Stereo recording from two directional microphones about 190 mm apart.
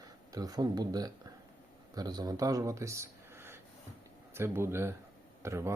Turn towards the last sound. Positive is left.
turn(degrees=-15)  # may be behind; listen again after turning